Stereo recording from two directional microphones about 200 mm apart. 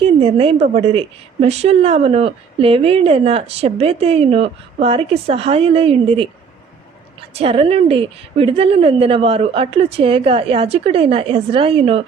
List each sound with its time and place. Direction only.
0.0 s a woman's voice: 30° right (ahead or behind)
7.3 s a woman's voice: 30° right (ahead or behind)